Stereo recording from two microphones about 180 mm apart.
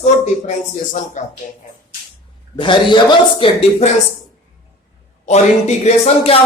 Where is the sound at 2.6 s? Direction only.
25° left (ahead or behind).